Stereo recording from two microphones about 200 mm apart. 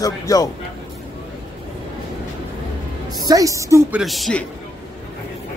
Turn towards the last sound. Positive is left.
turn(degrees=5)  # may be behind; listen again after turning